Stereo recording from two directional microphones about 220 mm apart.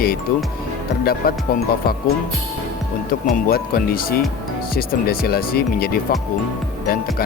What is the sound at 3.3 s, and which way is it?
Speech, 40° left (ahead or behind).